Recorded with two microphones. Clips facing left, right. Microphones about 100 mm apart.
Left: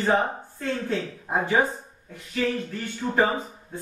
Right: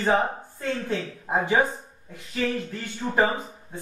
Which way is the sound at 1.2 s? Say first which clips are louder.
Right 1 dB; 20° right (ahead or behind).